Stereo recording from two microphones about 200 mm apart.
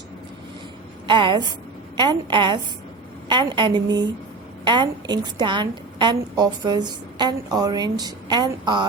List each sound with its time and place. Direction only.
1.0 s a woman's voice: 25° right (ahead or behind)